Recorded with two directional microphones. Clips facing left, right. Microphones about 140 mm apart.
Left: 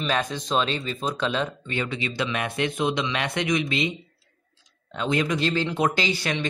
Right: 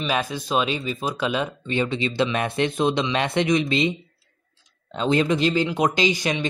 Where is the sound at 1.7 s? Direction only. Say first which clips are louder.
Right 5 dB; 25° right (ahead or behind).